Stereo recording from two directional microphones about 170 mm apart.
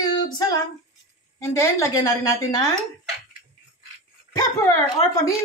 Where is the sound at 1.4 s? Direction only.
15° left (ahead or behind).